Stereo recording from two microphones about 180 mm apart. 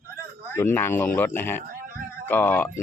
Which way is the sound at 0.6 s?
10° left (ahead or behind).